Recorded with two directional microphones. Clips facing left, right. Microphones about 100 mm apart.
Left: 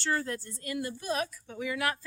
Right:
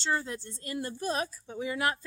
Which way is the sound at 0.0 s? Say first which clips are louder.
Even; 20° right (ahead or behind).